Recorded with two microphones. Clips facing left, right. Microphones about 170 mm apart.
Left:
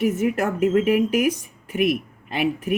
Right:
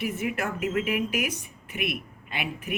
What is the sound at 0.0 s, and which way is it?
Speech, 40° left (ahead or behind).